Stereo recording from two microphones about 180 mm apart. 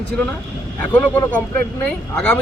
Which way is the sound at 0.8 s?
5° left (ahead or behind).